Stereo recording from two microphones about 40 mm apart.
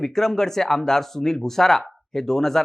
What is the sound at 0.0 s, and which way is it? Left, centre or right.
Speech, centre.